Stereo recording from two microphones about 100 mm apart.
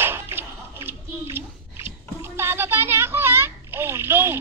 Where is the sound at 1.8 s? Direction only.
25° right (ahead or behind).